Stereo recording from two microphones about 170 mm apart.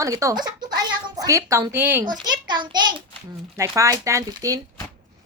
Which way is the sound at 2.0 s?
25° right (ahead or behind).